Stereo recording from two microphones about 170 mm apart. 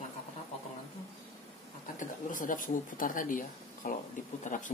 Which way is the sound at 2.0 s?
50° left (ahead or behind).